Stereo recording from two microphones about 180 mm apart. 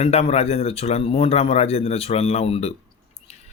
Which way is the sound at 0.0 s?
35° left (ahead or behind).